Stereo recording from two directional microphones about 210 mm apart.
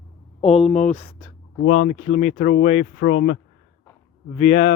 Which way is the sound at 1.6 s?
90° left.